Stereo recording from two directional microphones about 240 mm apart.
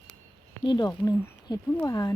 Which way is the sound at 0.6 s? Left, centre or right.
Centre.